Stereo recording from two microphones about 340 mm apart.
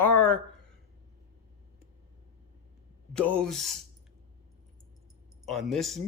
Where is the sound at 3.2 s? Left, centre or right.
Centre.